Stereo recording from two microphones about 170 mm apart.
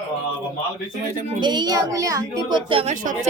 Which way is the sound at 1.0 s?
55° right (ahead or behind).